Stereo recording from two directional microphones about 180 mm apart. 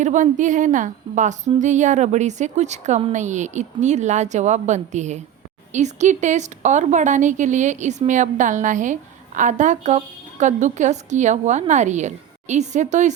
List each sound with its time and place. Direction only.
0.0 s a woman's voice: 45° right (ahead or behind)